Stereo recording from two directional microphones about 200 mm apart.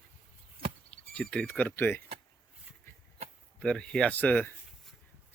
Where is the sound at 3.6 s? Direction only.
5° left (ahead or behind).